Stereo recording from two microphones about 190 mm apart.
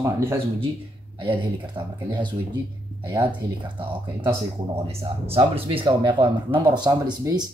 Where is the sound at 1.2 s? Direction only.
25° right (ahead or behind).